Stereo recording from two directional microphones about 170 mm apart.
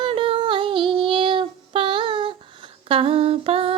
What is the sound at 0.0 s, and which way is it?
Female singing, 30° right (ahead or behind).